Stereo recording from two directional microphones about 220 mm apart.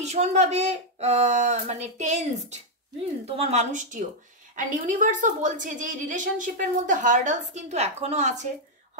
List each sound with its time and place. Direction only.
0.0 s a woman's voice: 30° right (ahead or behind)